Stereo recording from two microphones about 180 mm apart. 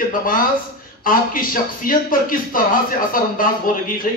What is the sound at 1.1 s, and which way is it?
A man's voice, 50° left (ahead or behind).